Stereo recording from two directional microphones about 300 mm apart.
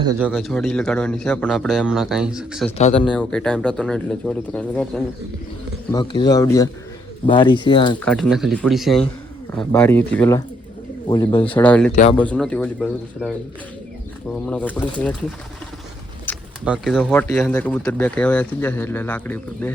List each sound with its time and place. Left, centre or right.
0.0 s speech: centre
0.3 s speech: centre
2.7 s speech: left
3.1 s speech: centre
7.9 s speech: centre
11.5 s speech: centre
14.4 s speech: centre
16.2 s speech: centre